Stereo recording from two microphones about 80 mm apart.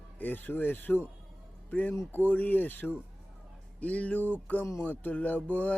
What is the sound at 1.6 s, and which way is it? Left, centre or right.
Speech, left.